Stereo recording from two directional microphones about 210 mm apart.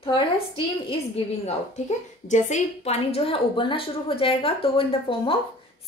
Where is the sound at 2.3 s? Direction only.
35° left (ahead or behind).